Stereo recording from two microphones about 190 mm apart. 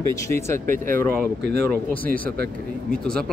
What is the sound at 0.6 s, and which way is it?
Speech, 45° right (ahead or behind).